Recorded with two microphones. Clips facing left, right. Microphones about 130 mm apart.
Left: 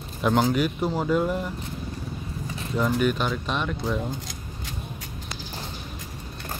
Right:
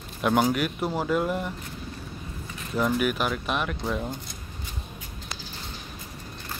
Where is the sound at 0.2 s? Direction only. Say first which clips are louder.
Left 1 dB; 5° right (ahead or behind).